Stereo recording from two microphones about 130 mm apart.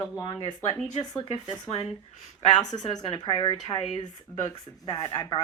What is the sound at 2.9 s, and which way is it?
Speech, 40° left (ahead or behind).